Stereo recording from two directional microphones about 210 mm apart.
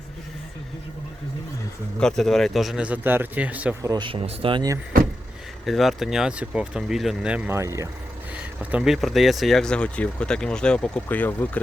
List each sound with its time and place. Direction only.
2.0 s speech: centre (ahead or behind)
3.9 s speech: 25° right (ahead or behind)
5.6 s speech: centre (ahead or behind)